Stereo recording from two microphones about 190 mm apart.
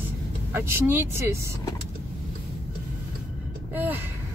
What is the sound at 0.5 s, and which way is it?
Speech, 10° right (ahead or behind).